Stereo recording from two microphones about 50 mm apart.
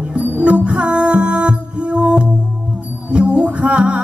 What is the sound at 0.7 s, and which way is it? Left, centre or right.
Music, right.